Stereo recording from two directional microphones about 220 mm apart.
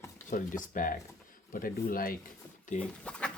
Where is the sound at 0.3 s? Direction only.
35° left (ahead or behind).